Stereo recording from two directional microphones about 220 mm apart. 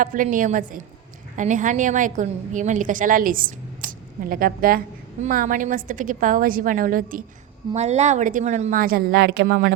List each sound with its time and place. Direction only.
0.0 s a woman's voice: 35° right (ahead or behind)